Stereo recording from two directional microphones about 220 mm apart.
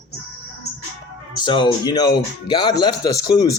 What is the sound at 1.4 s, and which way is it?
Speech, 20° left (ahead or behind).